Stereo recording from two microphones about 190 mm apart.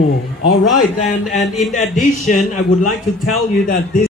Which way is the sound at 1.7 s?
45° left (ahead or behind).